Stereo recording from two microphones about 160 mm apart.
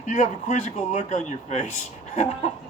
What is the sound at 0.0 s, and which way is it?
Speech, 45° left (ahead or behind).